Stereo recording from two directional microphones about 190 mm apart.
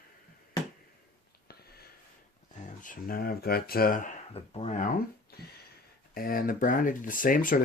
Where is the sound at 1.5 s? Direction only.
55° left (ahead or behind).